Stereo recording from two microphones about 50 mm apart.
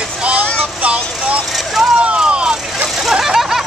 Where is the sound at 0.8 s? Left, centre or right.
Right.